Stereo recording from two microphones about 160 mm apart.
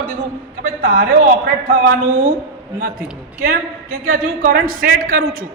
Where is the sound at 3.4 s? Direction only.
65° right (ahead or behind).